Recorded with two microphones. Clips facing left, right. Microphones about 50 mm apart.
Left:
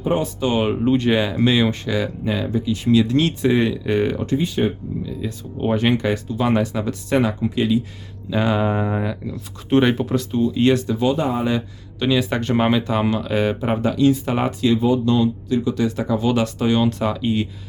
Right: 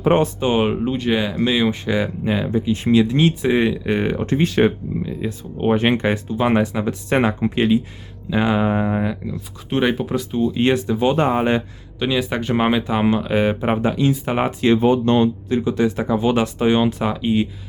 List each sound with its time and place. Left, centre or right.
0.3 s speech: right
0.7 s speech: centre
1.9 s speech: right
3.0 s speech: centre
4.4 s speech: right
5.0 s speech: right
8.3 s speech: centre
10.4 s speech: right
11.2 s speech: right
11.9 s speech: centre
14.6 s speech: right; by 17.5 s centre